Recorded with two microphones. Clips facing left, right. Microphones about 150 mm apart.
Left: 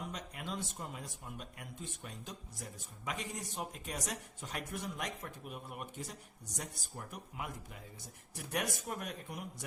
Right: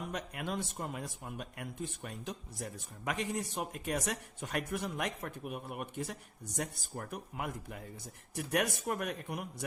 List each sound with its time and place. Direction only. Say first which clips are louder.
0.1 s speech: right 5 dB; 60° right (ahead or behind)